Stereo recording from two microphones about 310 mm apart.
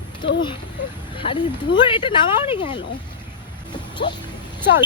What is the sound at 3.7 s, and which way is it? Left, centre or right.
Music, centre.